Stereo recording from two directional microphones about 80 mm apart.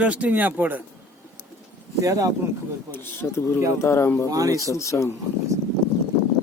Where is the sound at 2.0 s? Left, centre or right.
Right.